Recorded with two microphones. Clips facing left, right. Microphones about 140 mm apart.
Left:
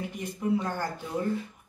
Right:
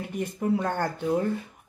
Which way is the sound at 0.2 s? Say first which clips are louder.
Right 3 dB; 55° right (ahead or behind).